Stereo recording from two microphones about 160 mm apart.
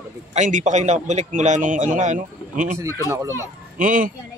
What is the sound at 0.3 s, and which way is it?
A man's voice, 50° right (ahead or behind).